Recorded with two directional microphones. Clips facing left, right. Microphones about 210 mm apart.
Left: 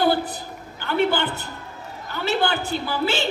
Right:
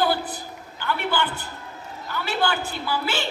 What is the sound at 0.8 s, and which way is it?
Speech, 25° left (ahead or behind).